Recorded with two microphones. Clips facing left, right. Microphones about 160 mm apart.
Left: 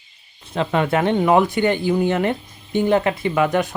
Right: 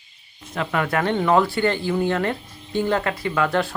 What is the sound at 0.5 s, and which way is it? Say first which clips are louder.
Speech: left 4 dB; 25° left (ahead or behind).